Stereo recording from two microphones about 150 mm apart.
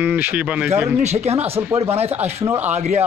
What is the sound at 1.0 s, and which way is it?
Speech, 45° right (ahead or behind).